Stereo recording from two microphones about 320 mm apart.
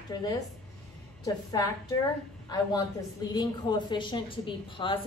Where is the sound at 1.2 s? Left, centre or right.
Centre.